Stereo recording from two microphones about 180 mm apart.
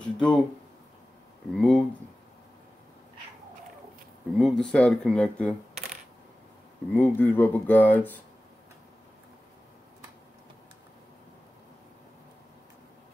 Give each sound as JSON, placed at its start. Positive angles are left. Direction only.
{"t": 0.0, "sound": "speech", "side_deg": 5}
{"t": 1.5, "sound": "speech", "side_deg": 5}
{"t": 4.4, "sound": "speech", "side_deg": 0}
{"t": 7.2, "sound": "speech", "side_deg": 10}